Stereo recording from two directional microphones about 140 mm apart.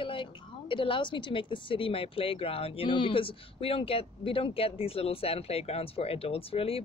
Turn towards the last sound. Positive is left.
turn(degrees=45)  # may be behind; listen again after turning